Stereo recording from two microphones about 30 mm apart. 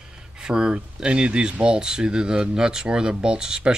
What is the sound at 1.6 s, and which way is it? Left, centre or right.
Speech, right.